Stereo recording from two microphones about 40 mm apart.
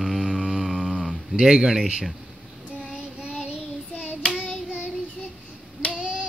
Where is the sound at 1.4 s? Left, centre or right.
Centre.